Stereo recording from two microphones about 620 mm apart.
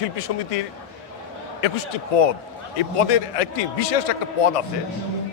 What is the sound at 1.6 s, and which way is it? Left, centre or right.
A man's voice, left.